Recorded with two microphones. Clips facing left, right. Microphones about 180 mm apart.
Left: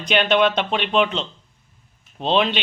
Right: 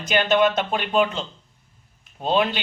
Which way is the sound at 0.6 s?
70° left (ahead or behind).